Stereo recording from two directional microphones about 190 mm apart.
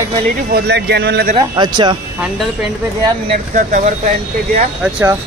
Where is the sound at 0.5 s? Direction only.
60° right (ahead or behind).